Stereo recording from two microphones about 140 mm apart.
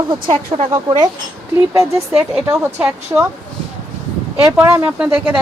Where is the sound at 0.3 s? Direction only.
40° right (ahead or behind).